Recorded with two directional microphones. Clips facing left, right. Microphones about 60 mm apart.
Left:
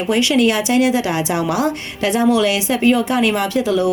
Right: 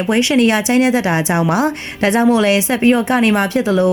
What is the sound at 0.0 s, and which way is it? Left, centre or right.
A woman's voice, right.